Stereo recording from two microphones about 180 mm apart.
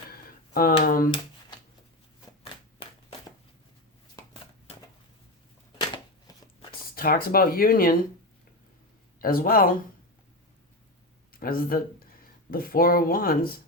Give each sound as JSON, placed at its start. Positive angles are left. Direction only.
{"t": 0.1, "sound": "a sound", "side_deg": 55}
{"t": 6.9, "sound": "speech", "side_deg": 55}
{"t": 9.1, "sound": "speech", "side_deg": 50}
{"t": 11.3, "sound": "speech", "side_deg": 55}